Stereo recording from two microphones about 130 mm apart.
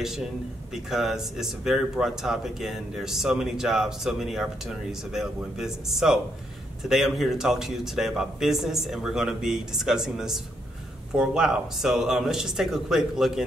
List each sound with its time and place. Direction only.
0.8 s speech: 5° right (ahead or behind)